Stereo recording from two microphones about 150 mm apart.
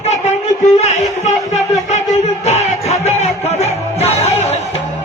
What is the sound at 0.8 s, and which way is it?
Music, 50° left (ahead or behind).